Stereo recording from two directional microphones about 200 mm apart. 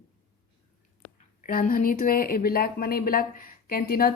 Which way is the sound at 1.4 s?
45° left (ahead or behind).